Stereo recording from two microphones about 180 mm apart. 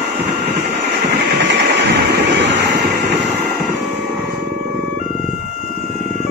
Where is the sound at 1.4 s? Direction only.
70° right (ahead or behind).